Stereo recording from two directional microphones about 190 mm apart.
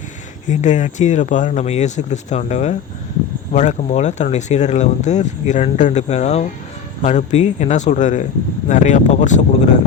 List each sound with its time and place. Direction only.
0.4 s speech: 40° left (ahead or behind)